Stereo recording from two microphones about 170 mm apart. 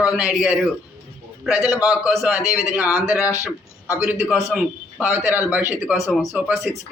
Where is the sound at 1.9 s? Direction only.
5° right (ahead or behind).